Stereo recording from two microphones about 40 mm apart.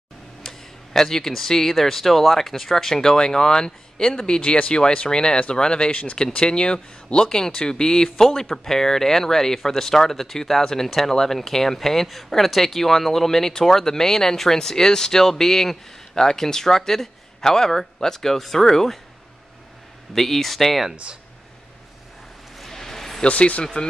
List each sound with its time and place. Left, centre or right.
0.4 s speech: centre
4.4 s speech: left
6.1 s speech: left
20.2 s speech: centre
20.9 s speech: right
22.6 s a sound: centre
23.2 s speech: left
23.6 s speech: centre